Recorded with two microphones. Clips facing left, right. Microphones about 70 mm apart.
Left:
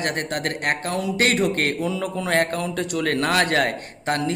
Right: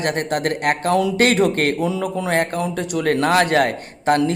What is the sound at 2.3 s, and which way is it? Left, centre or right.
Speech, centre.